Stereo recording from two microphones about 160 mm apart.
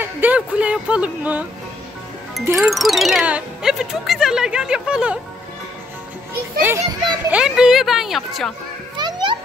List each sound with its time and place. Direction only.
0.0 s speech: 10° right (ahead or behind)
2.6 s speech: centre (ahead or behind)
6.6 s speech: 15° right (ahead or behind)
8.9 s music: 30° right (ahead or behind)